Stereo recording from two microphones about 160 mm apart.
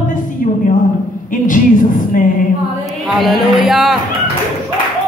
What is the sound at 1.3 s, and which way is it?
Speech, 55° left (ahead or behind).